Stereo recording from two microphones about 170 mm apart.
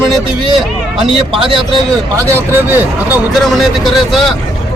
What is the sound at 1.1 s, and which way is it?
Speech, 30° right (ahead or behind).